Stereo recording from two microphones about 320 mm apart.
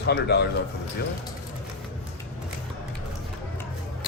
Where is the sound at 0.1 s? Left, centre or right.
Left.